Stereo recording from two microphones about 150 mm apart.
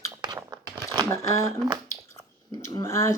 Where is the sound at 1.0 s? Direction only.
20° left (ahead or behind).